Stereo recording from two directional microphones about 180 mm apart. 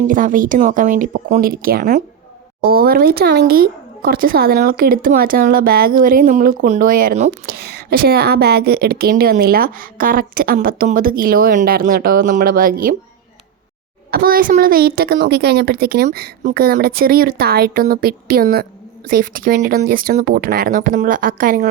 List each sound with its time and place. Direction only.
0.1 s a woman's voice: 50° right (ahead or behind)
14.1 s a woman's voice: 55° right (ahead or behind)